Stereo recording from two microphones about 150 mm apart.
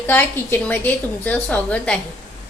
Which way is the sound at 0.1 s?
10° left (ahead or behind).